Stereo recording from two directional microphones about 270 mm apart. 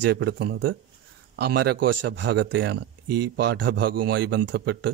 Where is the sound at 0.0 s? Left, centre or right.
Right.